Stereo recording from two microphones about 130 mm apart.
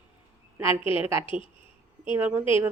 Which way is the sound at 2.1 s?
15° right (ahead or behind).